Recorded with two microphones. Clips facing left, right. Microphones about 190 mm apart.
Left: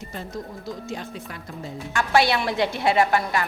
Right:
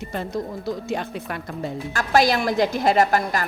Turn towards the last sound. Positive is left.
turn(degrees=-40)  # may be behind; listen again after turning